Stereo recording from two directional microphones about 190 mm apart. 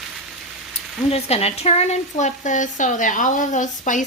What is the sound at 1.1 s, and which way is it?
Speech, 35° left (ahead or behind).